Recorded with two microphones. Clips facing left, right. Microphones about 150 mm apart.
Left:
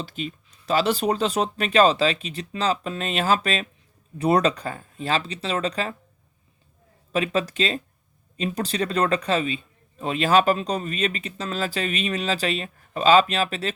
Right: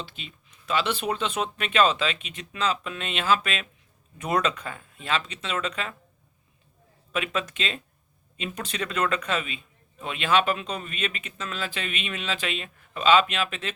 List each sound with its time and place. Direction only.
0.0 s speech: 45° left (ahead or behind)
7.1 s speech: 35° left (ahead or behind)